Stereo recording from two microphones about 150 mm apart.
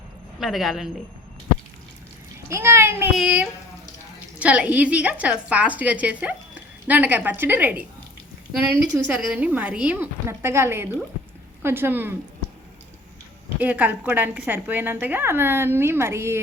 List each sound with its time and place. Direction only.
0.3 s a woman's voice: centre (ahead or behind)
2.5 s a woman's voice: 15° right (ahead or behind)
13.6 s a woman's voice: 10° right (ahead or behind)